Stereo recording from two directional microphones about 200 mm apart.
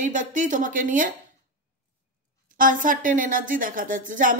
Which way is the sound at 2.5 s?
40° right (ahead or behind).